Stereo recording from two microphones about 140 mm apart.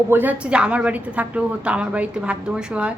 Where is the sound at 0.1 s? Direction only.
10° right (ahead or behind).